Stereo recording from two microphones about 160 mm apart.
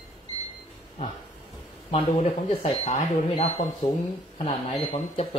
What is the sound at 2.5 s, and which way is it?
Speech, 35° left (ahead or behind).